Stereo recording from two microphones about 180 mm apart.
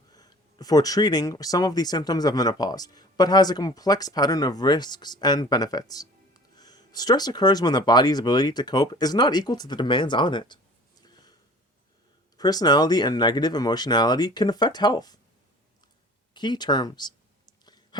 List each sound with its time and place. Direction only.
0.1 s speech: 20° left (ahead or behind)
12.4 s speech: 20° left (ahead or behind)
16.3 s clicking: 25° left (ahead or behind)